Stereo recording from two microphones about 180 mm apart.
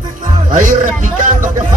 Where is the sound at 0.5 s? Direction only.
45° right (ahead or behind).